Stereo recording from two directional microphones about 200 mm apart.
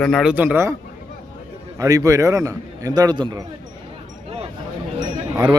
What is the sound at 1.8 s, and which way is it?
A man's voice, 15° right (ahead or behind).